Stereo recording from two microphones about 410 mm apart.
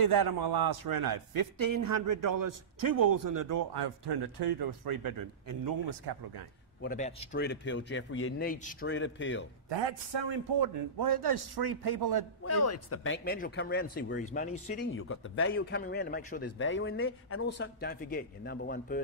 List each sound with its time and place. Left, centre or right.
0.0 s a man's voice: right
3.7 s a man's voice: right
5.9 s a man's voice: right
6.8 s speech: centre
9.7 s a man's voice: right
12.4 s speech: left; by 14.8 s centre
14.9 s speech: left